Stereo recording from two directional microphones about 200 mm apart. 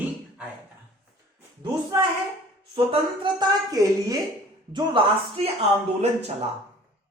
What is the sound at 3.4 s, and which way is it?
A woman's voice, 20° right (ahead or behind).